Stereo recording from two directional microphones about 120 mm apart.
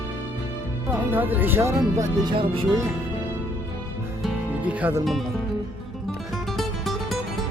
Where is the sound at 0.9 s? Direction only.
15° right (ahead or behind).